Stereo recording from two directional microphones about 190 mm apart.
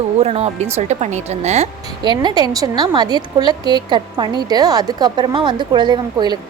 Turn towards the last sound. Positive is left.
turn(degrees=-25)  # may be behind; listen again after turning